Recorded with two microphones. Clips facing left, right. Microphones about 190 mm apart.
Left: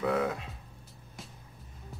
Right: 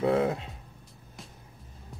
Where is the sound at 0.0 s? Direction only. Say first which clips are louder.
Right 4 dB; 30° right (ahead or behind).